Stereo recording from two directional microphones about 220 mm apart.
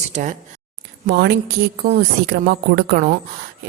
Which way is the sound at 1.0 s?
45° right (ahead or behind).